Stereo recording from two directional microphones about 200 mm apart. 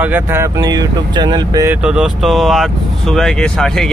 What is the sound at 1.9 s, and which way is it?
Speech, centre (ahead or behind).